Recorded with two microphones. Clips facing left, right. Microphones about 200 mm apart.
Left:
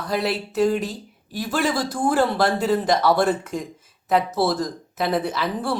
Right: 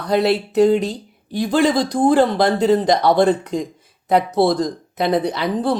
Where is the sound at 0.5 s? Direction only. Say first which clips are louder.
Right 5 dB; 20° right (ahead or behind).